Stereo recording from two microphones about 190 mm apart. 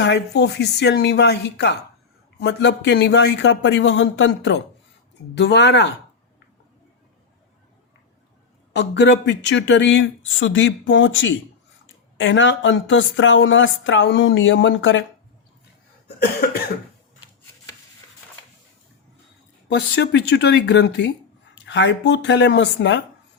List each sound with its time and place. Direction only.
0.0 s speech: 65° left (ahead or behind)
8.7 s a woman's voice: 65° left (ahead or behind)
19.6 s a woman's voice: 65° left (ahead or behind)